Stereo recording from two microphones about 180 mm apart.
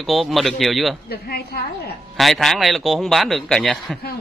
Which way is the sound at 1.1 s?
60° left (ahead or behind).